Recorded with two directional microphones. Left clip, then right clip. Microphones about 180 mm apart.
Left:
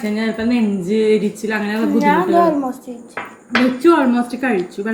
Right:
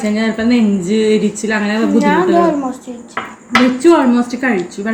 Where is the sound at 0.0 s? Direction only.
5° right (ahead or behind).